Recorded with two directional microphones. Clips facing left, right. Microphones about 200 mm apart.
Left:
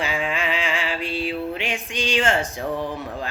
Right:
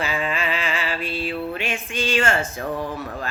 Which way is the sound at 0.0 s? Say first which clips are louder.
Even; 15° left (ahead or behind).